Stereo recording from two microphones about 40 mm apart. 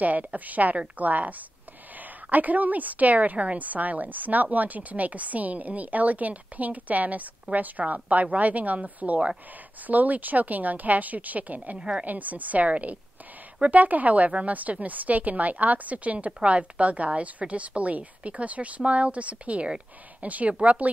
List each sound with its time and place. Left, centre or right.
0.0 s a woman's voice: right
2.3 s a woman's voice: right
16.3 s a woman's voice: right